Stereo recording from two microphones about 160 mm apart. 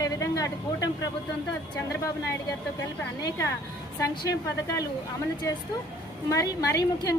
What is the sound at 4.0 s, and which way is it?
Speech, 20° left (ahead or behind).